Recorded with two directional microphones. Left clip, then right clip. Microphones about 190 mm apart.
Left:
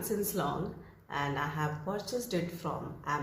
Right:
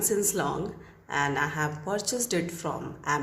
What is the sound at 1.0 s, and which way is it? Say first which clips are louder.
Speech: right 7 dB; 50° right (ahead or behind).